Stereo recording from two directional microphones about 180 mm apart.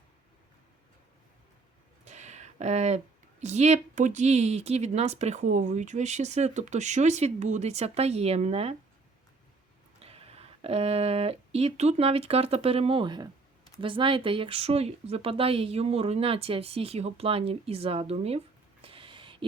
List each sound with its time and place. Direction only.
2.0 s a sound: 40° right (ahead or behind)
3.4 s speech: 40° right (ahead or behind)
10.0 s speech: 35° right (ahead or behind)